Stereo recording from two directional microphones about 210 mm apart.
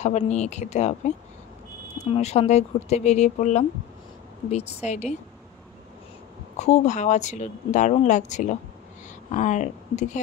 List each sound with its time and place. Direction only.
0.0 s speech: 35° left (ahead or behind)
6.5 s speech: 35° left (ahead or behind)